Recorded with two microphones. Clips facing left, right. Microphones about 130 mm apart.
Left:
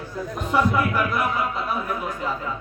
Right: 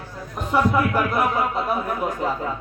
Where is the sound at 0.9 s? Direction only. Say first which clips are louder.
Right 2 dB; 45° right (ahead or behind).